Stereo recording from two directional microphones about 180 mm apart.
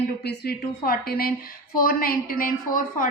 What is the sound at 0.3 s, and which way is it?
A woman's voice, 60° left (ahead or behind).